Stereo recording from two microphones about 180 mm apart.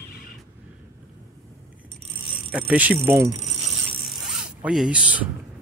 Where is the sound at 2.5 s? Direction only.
10° right (ahead or behind).